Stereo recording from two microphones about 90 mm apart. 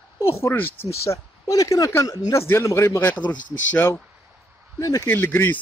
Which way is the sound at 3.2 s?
55° left (ahead or behind).